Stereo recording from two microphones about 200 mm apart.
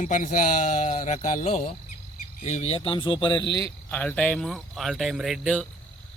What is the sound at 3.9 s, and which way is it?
Speech, 5° left (ahead or behind).